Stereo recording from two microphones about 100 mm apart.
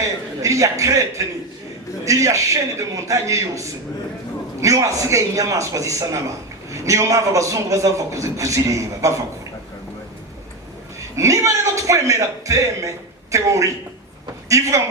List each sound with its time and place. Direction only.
0.0 s a man's voice: 35° right (ahead or behind)
11.1 s a man's voice: 30° right (ahead or behind)